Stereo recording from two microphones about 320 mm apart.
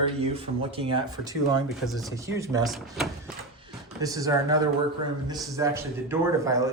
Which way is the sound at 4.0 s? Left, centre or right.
Centre.